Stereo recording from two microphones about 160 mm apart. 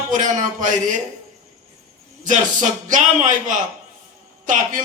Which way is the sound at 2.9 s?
50° right (ahead or behind).